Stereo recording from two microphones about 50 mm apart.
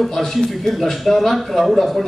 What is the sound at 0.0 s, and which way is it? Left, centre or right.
Speech, centre.